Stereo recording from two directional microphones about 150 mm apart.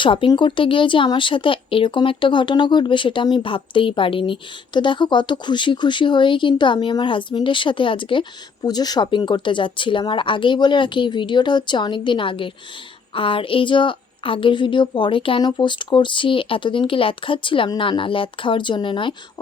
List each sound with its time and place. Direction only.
0.0 s speech: 35° left (ahead or behind)